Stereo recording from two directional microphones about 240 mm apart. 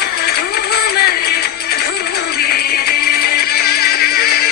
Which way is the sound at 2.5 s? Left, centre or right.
Left.